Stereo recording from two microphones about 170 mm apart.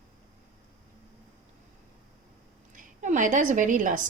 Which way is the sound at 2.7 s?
50° right (ahead or behind).